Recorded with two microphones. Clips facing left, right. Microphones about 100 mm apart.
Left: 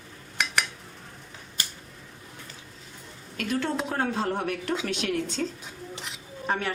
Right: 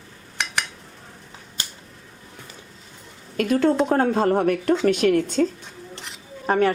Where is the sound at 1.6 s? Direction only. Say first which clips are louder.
Right 1 dB; 25° right (ahead or behind).